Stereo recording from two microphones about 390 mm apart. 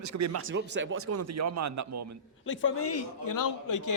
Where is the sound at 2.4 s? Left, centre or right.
Left.